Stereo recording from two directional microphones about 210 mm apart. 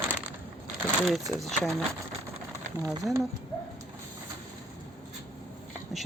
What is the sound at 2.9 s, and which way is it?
Speech, 15° right (ahead or behind).